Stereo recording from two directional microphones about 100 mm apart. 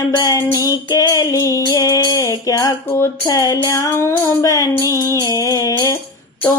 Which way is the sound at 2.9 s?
25° left (ahead or behind).